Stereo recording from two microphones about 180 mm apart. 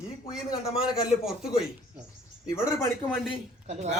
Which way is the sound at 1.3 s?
5° right (ahead or behind).